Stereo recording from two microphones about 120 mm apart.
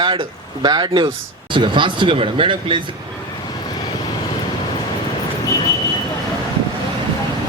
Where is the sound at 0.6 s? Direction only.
35° right (ahead or behind).